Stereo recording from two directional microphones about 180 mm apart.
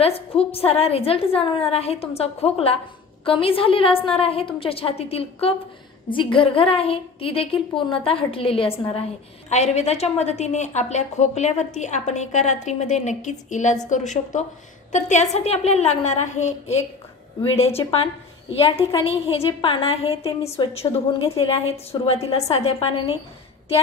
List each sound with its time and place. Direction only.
0.0 s a woman's voice: 35° left (ahead or behind)